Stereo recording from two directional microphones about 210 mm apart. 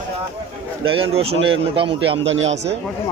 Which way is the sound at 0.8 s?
25° right (ahead or behind).